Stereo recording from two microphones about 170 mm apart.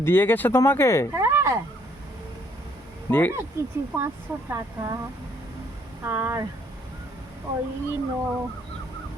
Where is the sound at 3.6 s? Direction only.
15° right (ahead or behind).